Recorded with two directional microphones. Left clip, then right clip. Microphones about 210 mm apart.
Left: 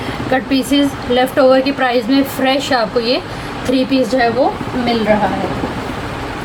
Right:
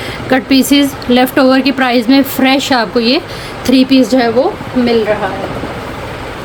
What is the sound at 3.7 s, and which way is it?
Speech, 55° right (ahead or behind).